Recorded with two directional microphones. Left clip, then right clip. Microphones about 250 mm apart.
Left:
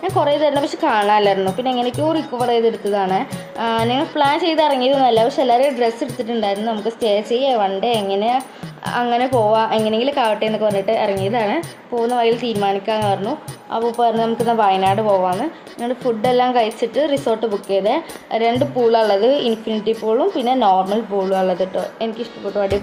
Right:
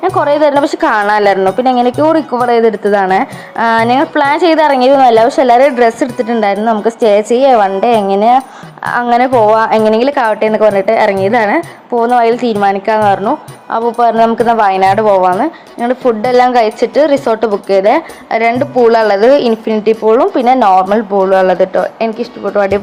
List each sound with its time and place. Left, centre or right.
0.0 s speech: right